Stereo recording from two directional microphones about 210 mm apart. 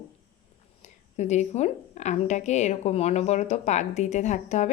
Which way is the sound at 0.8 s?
35° left (ahead or behind).